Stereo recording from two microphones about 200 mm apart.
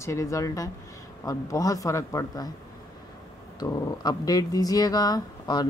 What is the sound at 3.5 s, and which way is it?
Speech, 20° left (ahead or behind).